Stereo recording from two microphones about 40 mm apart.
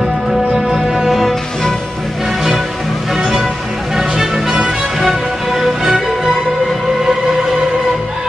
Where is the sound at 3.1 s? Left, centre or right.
Centre.